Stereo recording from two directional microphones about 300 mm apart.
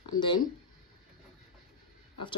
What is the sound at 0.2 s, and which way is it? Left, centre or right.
Speech, centre.